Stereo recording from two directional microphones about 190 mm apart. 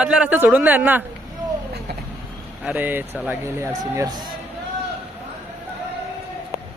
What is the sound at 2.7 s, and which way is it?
Speech, 10° right (ahead or behind).